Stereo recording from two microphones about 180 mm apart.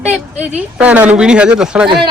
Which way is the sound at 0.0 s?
40° right (ahead or behind).